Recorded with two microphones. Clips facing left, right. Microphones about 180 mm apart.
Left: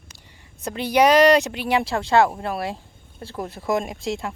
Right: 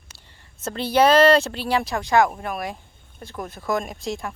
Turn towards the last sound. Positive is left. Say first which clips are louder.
# left 2 dB
turn(degrees=20)  # may be behind; listen again after turning